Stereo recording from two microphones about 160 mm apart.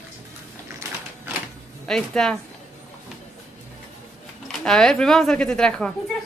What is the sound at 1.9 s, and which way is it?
Speech, 5° left (ahead or behind).